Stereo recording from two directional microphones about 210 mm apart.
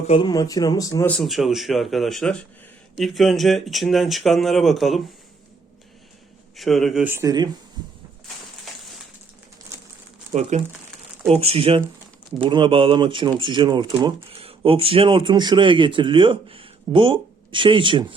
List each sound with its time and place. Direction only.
0.1 s speech: 20° left (ahead or behind); by 5.0 s centre (ahead or behind)
6.6 s speech: centre (ahead or behind); by 7.5 s 20° right (ahead or behind)
10.5 s speech: 35° right (ahead or behind)